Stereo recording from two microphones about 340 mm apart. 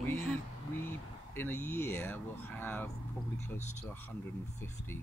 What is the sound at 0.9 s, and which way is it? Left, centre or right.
Speech, centre.